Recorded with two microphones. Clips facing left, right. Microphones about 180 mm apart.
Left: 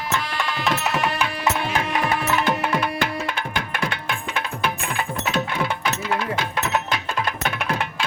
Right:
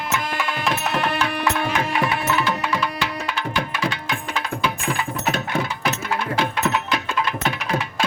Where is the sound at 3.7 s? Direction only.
55° left (ahead or behind).